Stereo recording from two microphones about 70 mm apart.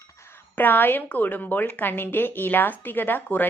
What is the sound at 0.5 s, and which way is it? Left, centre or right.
A woman's voice, left.